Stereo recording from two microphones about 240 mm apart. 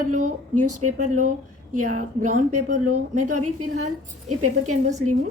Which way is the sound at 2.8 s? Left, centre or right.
Right.